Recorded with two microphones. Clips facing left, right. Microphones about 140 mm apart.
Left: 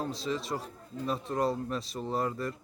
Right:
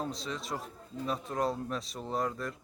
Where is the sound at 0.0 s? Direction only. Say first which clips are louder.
Left 4 dB; centre (ahead or behind).